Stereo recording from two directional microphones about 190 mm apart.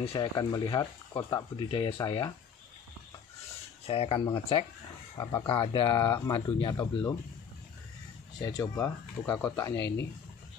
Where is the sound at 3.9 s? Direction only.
30° left (ahead or behind).